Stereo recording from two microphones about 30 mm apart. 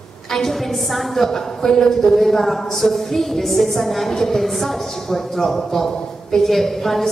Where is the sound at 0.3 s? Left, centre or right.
Centre.